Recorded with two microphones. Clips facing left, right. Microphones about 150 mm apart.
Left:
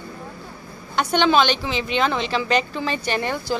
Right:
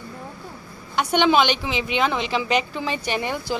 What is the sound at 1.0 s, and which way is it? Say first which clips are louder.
A woman's voice: even; 15° right (ahead or behind).